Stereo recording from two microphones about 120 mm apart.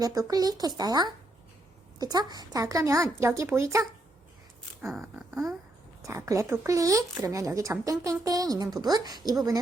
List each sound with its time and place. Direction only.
0.0 s a woman's voice: 30° right (ahead or behind)
5.1 s a sound: 5° right (ahead or behind)
6.0 s a woman's voice: 25° right (ahead or behind)